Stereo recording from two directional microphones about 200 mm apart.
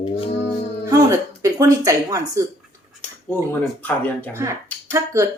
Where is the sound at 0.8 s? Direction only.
15° right (ahead or behind).